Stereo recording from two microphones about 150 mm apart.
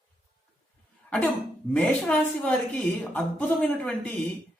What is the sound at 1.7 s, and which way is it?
Speech, 10° left (ahead or behind).